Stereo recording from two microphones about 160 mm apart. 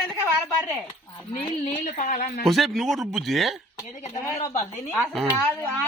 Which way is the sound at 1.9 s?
55° left (ahead or behind).